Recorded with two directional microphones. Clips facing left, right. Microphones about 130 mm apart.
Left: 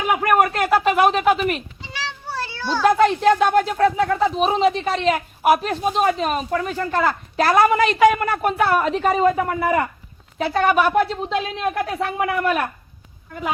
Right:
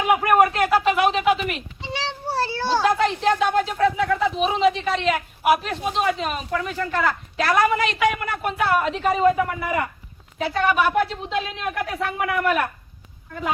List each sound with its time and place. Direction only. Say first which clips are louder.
0.2 s speech: even; 45° left (ahead or behind)
1.9 s a sound: right 3 dB; 30° right (ahead or behind)
3.0 s speech: left 5 dB; 50° left (ahead or behind); by 12.6 s 30° left (ahead or behind)